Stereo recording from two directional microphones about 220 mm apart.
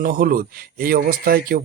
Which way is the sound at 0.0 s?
40° right (ahead or behind).